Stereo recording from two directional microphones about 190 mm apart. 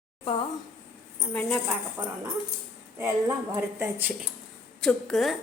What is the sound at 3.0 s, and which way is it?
A woman's voice, 15° right (ahead or behind).